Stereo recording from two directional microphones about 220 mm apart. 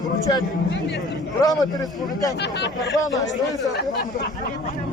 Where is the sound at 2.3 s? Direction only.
50° left (ahead or behind).